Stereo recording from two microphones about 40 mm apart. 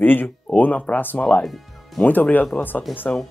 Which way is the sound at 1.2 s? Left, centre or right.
Centre.